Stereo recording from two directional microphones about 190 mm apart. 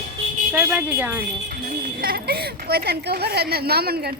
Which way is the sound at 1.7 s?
50° right (ahead or behind).